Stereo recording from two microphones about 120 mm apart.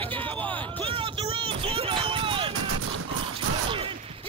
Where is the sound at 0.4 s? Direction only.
10° left (ahead or behind).